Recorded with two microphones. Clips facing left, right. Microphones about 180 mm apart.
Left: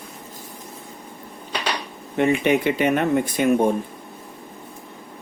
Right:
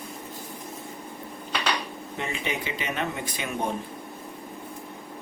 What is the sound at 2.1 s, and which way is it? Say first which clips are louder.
Speech: left 14 dB; 65° left (ahead or behind).